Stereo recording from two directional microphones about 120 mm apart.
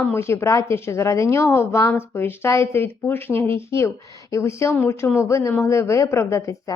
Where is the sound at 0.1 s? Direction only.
20° left (ahead or behind).